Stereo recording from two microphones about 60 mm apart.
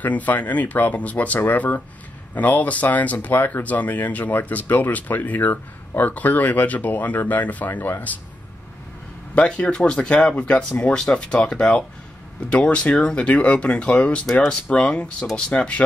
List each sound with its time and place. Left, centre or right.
0.0 s speech: left
9.3 s speech: centre
14.2 s speech: centre
14.5 s speech: centre